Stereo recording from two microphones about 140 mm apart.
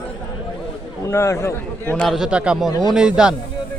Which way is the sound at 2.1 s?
5° right (ahead or behind).